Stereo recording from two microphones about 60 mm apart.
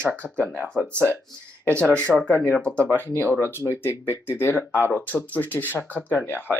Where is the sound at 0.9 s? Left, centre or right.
Right.